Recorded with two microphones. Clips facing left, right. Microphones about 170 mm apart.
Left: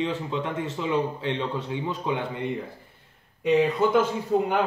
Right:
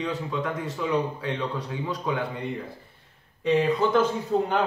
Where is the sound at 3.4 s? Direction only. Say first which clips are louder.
Left 1 dB; 10° left (ahead or behind).